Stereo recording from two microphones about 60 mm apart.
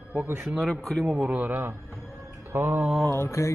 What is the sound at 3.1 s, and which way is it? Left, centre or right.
Mantra, left.